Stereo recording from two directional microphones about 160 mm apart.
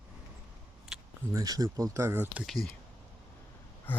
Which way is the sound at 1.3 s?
20° right (ahead or behind).